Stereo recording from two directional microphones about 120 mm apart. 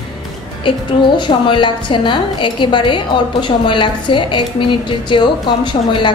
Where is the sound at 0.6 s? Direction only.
40° left (ahead or behind).